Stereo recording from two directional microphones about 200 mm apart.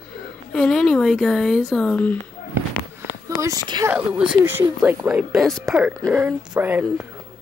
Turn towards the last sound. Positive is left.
turn(degrees=-10)  # may be behind; listen again after turning